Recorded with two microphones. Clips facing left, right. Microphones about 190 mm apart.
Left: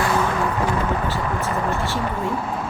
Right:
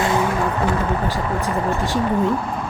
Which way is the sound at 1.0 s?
15° right (ahead or behind).